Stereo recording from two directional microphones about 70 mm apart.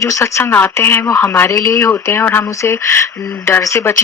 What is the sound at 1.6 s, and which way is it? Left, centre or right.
Speech, left.